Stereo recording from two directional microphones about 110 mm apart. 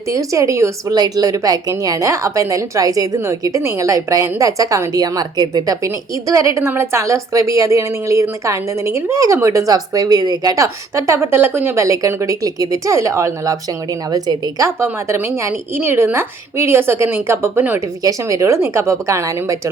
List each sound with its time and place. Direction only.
0.1 s a woman's voice: 30° right (ahead or behind)
18.0 s a woman's voice: 30° right (ahead or behind)